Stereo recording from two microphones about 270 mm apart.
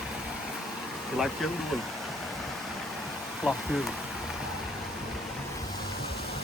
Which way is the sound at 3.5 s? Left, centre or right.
Centre.